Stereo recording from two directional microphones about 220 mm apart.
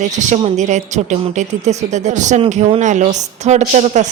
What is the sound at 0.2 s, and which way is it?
Speech, 30° right (ahead or behind).